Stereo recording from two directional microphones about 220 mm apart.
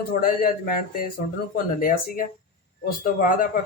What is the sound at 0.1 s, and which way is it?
A man's voice, 40° left (ahead or behind).